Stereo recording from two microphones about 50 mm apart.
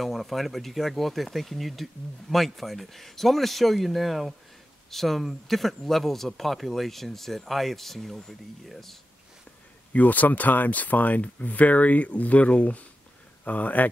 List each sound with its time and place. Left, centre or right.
0.0 s speech: centre
9.9 s speech: left